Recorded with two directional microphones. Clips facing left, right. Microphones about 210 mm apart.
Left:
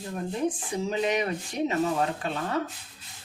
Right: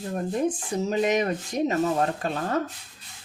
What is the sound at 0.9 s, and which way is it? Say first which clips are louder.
Speech: right 3 dB; 45° right (ahead or behind).